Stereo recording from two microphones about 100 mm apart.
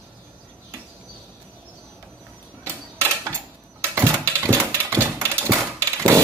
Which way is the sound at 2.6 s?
25° right (ahead or behind).